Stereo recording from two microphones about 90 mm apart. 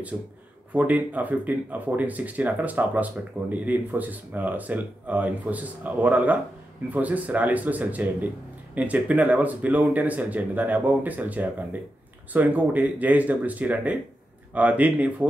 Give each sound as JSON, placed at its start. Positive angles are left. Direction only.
{"t": 0.1, "sound": "speech", "side_deg": -25}